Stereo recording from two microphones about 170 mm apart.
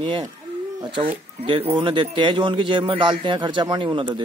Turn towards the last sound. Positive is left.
turn(degrees=-30)  # may be behind; listen again after turning